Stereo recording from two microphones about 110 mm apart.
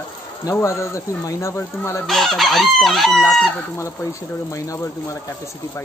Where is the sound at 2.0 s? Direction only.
Centre (ahead or behind).